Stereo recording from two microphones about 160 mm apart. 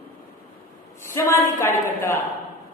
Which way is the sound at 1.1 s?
15° left (ahead or behind).